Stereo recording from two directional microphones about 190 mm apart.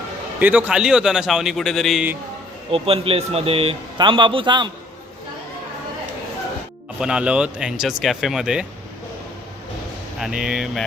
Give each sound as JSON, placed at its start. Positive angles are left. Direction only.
{"t": 0.3, "sound": "a man's voice", "side_deg": -10}
{"t": 2.6, "sound": "speech", "side_deg": -30}
{"t": 7.0, "sound": "a man's voice", "side_deg": -5}
{"t": 10.2, "sound": "a man's voice", "side_deg": -5}